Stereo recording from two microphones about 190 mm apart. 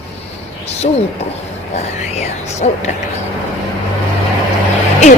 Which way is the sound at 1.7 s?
35° left (ahead or behind).